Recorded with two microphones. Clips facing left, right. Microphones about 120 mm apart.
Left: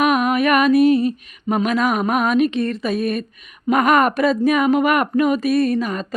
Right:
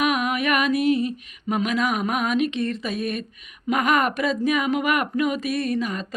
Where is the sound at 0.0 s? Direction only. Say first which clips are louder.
Left 6 dB; 45° left (ahead or behind).